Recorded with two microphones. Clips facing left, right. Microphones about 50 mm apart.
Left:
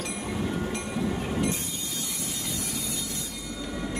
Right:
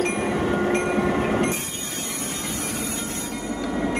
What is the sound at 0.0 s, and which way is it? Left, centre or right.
Train, right.